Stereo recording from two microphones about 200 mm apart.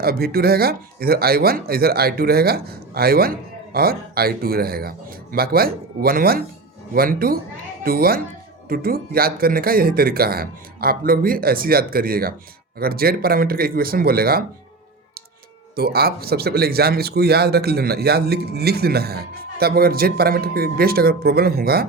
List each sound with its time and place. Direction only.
0.0 s speech: 50° right (ahead or behind)
15.7 s speech: 50° right (ahead or behind)